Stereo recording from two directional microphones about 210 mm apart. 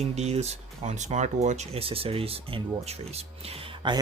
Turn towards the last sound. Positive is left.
turn(degrees=-20)  # may be behind; listen again after turning